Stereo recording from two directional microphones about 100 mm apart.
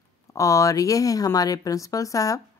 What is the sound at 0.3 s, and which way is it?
Speech, 35° left (ahead or behind).